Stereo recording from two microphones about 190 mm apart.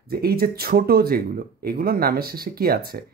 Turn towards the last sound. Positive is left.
turn(degrees=-55)  # may be behind; listen again after turning